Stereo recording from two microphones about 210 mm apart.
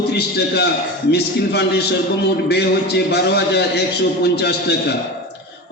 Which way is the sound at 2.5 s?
50° left (ahead or behind).